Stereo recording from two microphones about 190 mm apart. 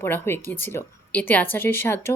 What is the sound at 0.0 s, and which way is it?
A woman's voice, 10° left (ahead or behind).